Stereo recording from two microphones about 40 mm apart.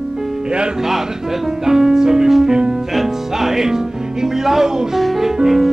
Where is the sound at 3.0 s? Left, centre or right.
Centre.